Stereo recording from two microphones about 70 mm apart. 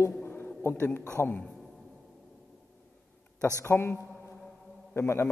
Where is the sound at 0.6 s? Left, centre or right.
Left.